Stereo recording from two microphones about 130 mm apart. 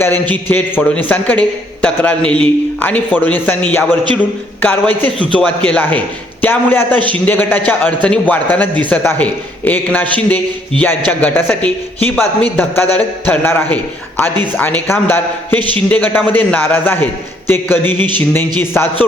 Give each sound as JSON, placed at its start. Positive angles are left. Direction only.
{"t": 0.0, "sound": "a man's voice", "side_deg": 15}